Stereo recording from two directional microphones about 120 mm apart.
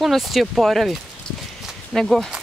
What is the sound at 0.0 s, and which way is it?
Speech, centre (ahead or behind).